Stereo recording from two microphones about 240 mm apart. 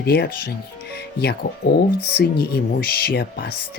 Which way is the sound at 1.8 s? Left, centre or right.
Left.